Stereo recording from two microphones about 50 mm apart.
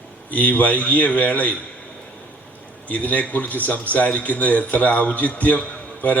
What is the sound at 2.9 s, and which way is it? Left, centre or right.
A man's voice, left.